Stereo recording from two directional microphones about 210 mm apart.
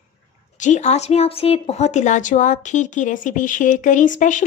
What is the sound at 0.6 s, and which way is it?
Speech, 35° left (ahead or behind).